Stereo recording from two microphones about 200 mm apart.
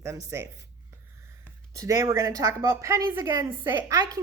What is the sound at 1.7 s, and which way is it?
Speech, 15° right (ahead or behind).